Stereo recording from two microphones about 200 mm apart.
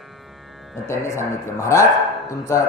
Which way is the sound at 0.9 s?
15° left (ahead or behind).